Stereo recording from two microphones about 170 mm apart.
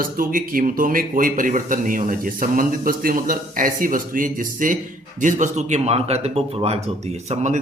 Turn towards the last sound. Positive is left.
turn(degrees=-45)  # may be behind; listen again after turning